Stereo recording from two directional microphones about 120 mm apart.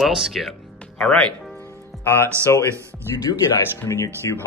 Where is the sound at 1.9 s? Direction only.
Centre (ahead or behind).